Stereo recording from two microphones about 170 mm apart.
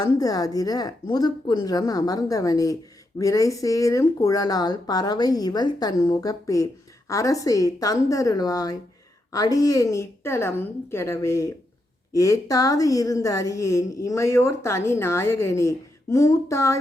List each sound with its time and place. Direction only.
0.0 s a woman's voice: 20° left (ahead or behind)